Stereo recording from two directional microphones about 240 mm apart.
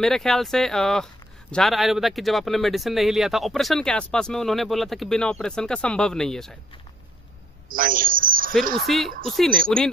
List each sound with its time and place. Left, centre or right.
0.0 s speech: centre
7.6 s speech: right
8.8 s speech: centre